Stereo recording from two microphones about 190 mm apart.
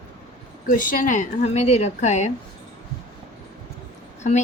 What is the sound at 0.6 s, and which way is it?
A woman's voice, 45° left (ahead or behind).